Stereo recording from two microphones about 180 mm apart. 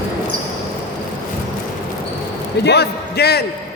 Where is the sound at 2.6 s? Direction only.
65° left (ahead or behind).